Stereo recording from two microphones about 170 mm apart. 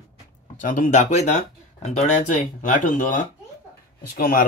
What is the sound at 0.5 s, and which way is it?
Speech, 50° left (ahead or behind).